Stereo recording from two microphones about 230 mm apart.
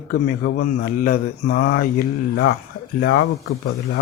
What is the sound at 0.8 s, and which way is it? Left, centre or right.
Speech, left.